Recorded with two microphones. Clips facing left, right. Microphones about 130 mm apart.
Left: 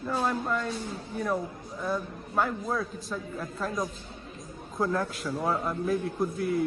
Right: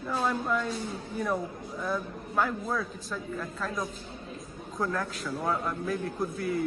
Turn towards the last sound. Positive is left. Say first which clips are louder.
# left 3 dB
turn(degrees=0)  # may be behind; listen again after turning